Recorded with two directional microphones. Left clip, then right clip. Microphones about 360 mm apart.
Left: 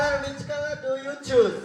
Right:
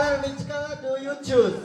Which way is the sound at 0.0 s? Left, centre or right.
Centre.